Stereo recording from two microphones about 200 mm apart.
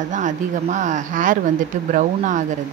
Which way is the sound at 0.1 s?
40° right (ahead or behind).